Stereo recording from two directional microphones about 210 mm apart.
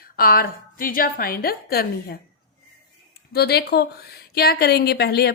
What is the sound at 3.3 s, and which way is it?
A woman's voice, 50° left (ahead or behind).